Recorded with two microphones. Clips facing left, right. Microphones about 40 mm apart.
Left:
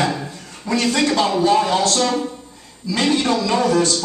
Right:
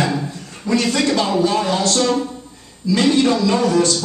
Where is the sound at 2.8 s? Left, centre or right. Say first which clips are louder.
Right 3 dB; centre.